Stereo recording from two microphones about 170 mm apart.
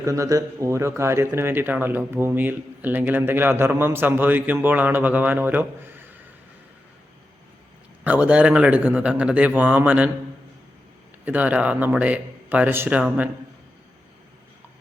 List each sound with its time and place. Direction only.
0.0 s speech: 20° right (ahead or behind)
8.0 s speech: 10° right (ahead or behind)
11.3 s speech: 10° right (ahead or behind)